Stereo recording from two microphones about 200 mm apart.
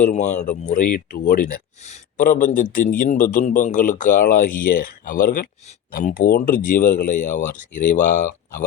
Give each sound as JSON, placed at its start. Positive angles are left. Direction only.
{"t": 0.0, "sound": "speech", "side_deg": 35}